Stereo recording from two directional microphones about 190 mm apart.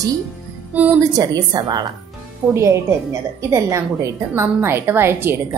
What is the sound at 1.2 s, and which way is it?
A woman's voice, 20° right (ahead or behind).